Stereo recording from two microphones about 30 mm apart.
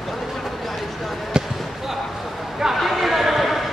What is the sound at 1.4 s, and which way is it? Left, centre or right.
Basketball bounce, right.